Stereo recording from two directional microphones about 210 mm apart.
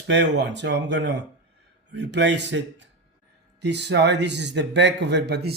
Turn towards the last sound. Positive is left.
turn(degrees=-55)  # may be behind; listen again after turning